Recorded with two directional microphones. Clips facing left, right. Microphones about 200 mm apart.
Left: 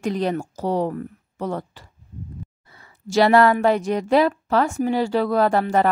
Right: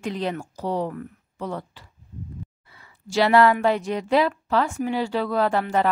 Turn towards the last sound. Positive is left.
turn(degrees=45)  # may be behind; listen again after turning